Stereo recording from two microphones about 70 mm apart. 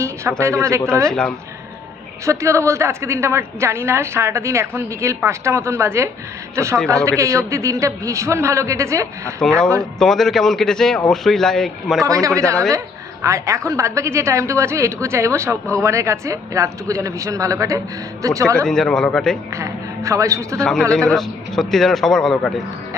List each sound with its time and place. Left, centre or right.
0.0 s a woman's voice: right
1.0 s speech: centre
2.2 s a woman's voice: right
10.0 s a man's voice: centre
12.0 s a woman's voice: right
18.6 s speech: centre
19.5 s a woman's voice: right
20.6 s a man's voice: centre